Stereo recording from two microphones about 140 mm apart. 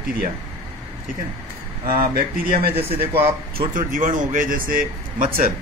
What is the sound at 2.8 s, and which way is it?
Speech, 45° right (ahead or behind).